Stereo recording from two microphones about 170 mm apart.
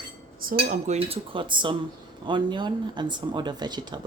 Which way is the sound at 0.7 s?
40° right (ahead or behind).